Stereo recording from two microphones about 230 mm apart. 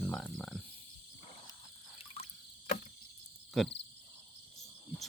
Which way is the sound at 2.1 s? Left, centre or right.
Left.